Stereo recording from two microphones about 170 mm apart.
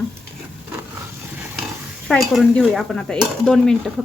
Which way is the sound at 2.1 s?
5° left (ahead or behind).